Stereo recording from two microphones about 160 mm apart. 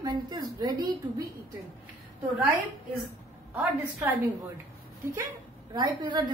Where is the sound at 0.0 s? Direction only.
25° right (ahead or behind).